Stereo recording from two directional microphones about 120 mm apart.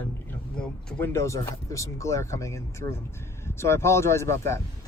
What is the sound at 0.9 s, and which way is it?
Speech, 20° left (ahead or behind).